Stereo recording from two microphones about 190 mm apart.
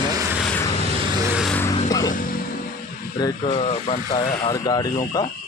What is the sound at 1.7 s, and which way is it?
Music, 20° left (ahead or behind).